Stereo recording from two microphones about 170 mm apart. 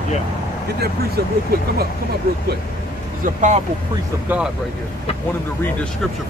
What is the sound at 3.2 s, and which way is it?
Speech, 45° right (ahead or behind).